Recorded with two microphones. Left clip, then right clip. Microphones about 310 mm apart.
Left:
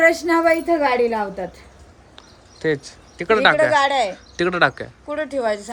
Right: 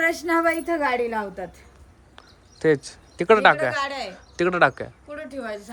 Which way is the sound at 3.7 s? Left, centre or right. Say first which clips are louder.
Left 10 dB; left.